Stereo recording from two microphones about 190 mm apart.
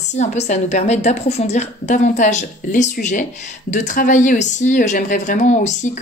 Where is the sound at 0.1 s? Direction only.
35° left (ahead or behind).